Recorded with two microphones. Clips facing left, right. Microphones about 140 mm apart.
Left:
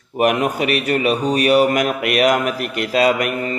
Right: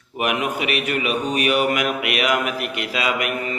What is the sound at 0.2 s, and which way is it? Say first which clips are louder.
Mantra: left 6 dB; 40° left (ahead or behind).